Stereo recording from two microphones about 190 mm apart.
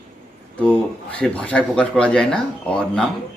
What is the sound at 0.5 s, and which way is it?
Speech, 5° left (ahead or behind).